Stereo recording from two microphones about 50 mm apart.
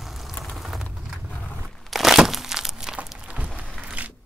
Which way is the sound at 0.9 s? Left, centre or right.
Centre.